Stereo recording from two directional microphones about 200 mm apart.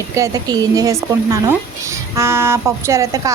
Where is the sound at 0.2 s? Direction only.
20° right (ahead or behind).